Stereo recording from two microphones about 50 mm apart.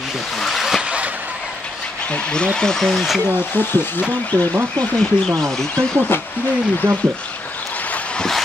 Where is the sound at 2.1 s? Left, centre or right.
Centre.